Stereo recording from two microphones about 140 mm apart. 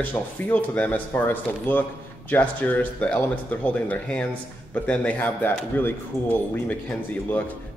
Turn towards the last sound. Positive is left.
turn(degrees=15)  # may be behind; listen again after turning